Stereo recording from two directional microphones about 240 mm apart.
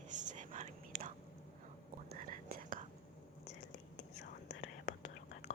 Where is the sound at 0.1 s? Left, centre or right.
Right.